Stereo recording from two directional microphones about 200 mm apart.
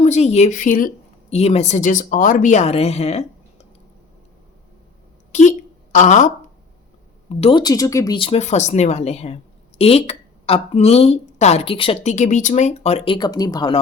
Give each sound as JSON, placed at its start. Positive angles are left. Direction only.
{"t": 0.0, "sound": "speech", "side_deg": 35}
{"t": 5.3, "sound": "a woman's voice", "side_deg": 35}
{"t": 7.3, "sound": "speech", "side_deg": 25}
{"t": 13.1, "sound": "speech", "side_deg": 20}